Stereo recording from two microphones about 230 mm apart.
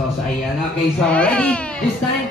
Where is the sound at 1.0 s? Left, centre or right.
Centre.